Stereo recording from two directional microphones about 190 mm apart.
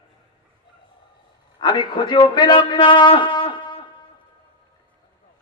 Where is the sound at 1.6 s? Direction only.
25° left (ahead or behind).